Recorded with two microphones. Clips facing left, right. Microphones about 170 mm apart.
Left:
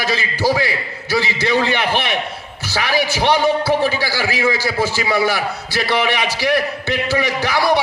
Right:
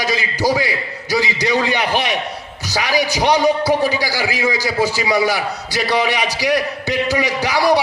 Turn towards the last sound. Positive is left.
turn(degrees=-10)  # may be behind; listen again after turning